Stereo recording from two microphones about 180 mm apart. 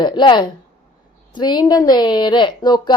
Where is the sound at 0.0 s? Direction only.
25° left (ahead or behind).